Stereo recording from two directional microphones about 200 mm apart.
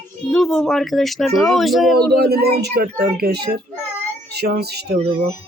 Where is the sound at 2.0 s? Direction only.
50° right (ahead or behind).